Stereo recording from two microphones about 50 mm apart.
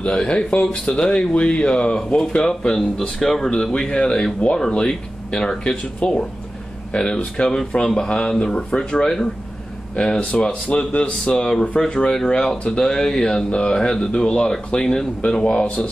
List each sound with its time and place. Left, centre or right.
0.1 s speech: centre
3.2 s speech: centre
10.3 s speech: centre